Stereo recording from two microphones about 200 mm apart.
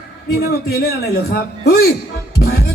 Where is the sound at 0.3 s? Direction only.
50° left (ahead or behind).